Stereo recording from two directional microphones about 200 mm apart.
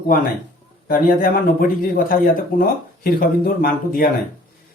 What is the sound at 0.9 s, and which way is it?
Speech, 45° left (ahead or behind).